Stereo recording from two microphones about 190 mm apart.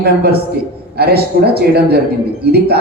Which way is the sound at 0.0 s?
55° right (ahead or behind).